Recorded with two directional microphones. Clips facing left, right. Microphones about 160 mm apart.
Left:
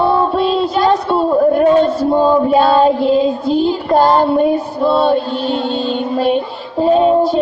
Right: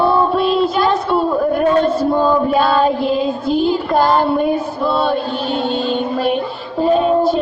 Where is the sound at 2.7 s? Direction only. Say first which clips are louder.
Left 4 dB; 35° left (ahead or behind).